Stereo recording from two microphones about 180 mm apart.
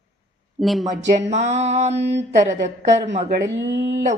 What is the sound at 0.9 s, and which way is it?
A woman's voice, 40° right (ahead or behind).